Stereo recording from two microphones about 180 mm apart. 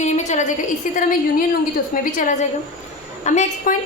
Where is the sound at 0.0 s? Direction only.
40° left (ahead or behind).